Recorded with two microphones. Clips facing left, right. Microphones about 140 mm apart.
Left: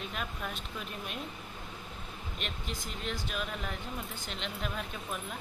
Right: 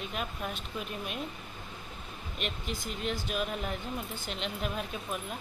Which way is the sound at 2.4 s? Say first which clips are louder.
Right 5 dB; 10° right (ahead or behind).